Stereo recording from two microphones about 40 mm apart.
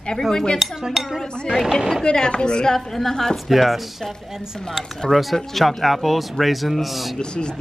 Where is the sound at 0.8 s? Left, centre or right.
Centre.